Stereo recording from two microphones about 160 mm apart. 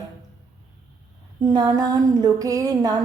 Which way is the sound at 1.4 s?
25° right (ahead or behind).